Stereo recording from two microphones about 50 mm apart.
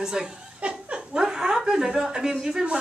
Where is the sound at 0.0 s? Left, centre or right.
Centre.